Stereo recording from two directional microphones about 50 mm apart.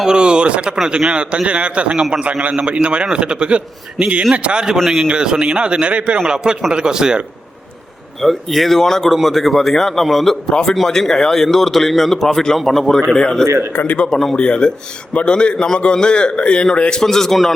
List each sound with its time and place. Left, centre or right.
0.0 s a man's voice: centre
8.2 s a man's voice: centre
13.7 s speech: left
14.0 s a man's voice: centre
17.0 s a man's voice: centre